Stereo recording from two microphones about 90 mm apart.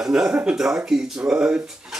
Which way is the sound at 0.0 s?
5° right (ahead or behind).